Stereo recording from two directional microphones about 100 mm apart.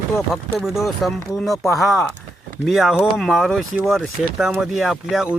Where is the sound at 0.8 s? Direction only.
Centre (ahead or behind).